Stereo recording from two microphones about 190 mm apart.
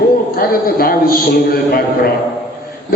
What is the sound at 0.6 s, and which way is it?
Speech, 50° left (ahead or behind).